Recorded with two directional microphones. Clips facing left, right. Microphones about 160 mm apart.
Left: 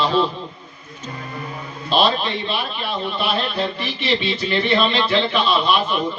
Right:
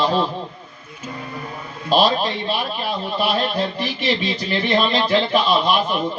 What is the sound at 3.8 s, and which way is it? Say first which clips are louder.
Speech: right 1 dB; 40° right (ahead or behind).